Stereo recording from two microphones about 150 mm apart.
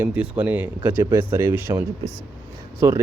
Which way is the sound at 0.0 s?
10° right (ahead or behind).